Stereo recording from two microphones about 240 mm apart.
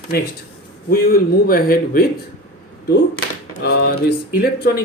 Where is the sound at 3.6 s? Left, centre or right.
Left.